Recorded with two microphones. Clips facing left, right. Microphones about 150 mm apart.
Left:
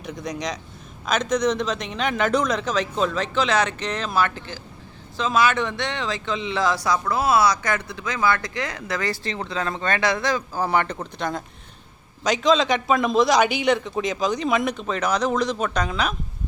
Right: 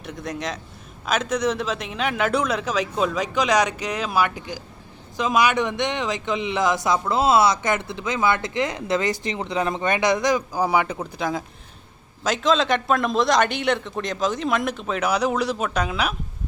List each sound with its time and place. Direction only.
0.0 s a man's voice: centre (ahead or behind)